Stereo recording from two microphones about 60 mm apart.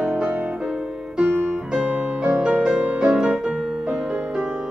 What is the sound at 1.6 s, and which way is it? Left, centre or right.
Music, centre.